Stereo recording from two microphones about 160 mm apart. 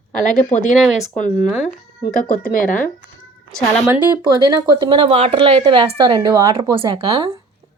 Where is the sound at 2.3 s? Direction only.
60° left (ahead or behind).